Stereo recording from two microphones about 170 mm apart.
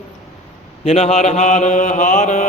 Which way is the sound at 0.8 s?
40° left (ahead or behind).